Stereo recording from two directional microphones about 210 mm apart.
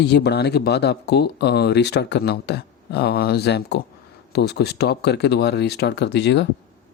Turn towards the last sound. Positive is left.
turn(degrees=55)  # may be behind; listen again after turning